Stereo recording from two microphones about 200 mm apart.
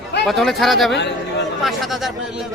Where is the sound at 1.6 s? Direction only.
Centre (ahead or behind).